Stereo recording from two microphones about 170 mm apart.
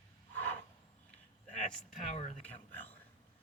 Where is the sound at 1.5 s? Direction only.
45° left (ahead or behind).